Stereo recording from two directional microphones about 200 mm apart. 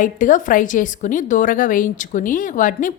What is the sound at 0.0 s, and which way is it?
A woman's voice, 40° left (ahead or behind).